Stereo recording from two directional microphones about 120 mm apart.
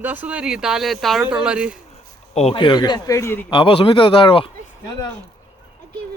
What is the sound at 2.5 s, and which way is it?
Speech, 40° left (ahead or behind).